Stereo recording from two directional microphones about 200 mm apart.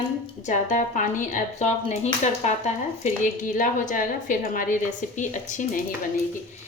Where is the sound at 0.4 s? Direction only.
40° left (ahead or behind).